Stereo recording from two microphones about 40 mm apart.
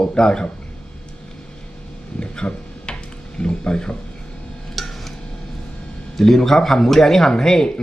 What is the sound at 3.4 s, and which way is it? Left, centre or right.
Speech, left.